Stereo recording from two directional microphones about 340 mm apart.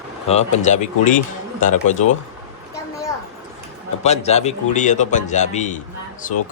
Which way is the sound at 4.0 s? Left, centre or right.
Centre.